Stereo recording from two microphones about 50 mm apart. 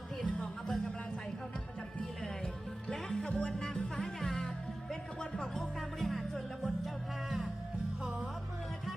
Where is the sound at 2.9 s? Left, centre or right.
Centre.